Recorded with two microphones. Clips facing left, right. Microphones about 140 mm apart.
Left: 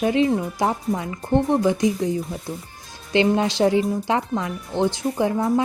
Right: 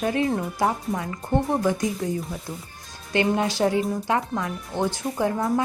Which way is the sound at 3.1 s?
25° left (ahead or behind).